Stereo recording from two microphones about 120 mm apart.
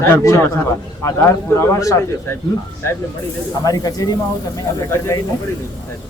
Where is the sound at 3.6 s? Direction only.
30° left (ahead or behind).